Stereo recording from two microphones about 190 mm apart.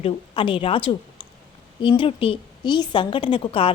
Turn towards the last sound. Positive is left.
turn(degrees=30)  # may be behind; listen again after turning